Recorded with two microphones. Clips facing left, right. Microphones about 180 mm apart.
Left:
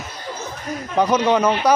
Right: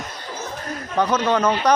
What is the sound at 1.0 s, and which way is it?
Speech, 10° left (ahead or behind).